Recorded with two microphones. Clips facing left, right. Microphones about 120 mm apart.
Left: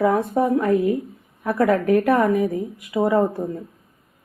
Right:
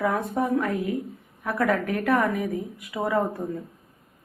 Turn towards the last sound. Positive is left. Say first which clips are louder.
# left 5 dB
turn(degrees=30)  # may be behind; listen again after turning